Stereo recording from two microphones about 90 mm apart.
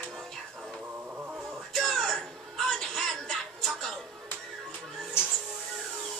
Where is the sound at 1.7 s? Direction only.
5° left (ahead or behind).